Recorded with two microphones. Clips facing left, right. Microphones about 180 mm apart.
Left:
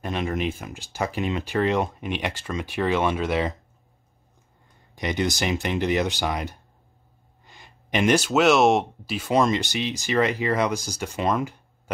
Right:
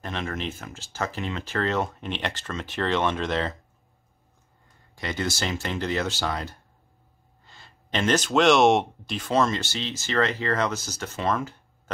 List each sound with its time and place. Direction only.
0.0 s speech: 15° left (ahead or behind)
4.9 s speech: 15° left (ahead or behind)